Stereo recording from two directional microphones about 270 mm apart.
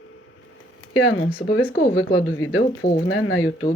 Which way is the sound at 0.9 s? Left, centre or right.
Left.